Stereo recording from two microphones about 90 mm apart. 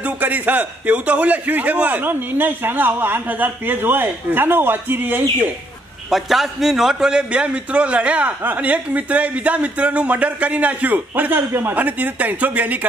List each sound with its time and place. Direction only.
0.0 s a man's voice: 20° right (ahead or behind)
6.0 s a man's voice: centre (ahead or behind); by 12.8 s 20° right (ahead or behind)